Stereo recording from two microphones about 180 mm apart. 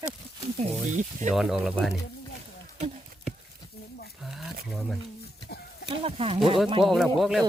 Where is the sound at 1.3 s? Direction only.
Centre (ahead or behind).